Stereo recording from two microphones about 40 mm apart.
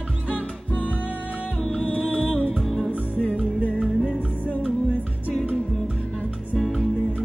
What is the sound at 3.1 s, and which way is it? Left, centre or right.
Music, left.